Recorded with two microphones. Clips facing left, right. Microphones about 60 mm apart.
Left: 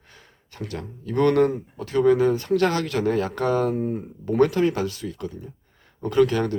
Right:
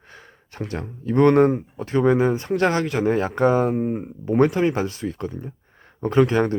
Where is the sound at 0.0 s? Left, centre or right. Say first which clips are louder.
Right 6 dB; right.